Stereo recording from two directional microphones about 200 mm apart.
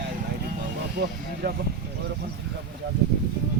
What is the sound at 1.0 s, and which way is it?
Vehicle, 60° right (ahead or behind).